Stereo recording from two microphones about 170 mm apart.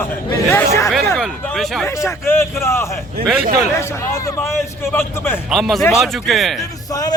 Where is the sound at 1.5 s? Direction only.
Centre (ahead or behind).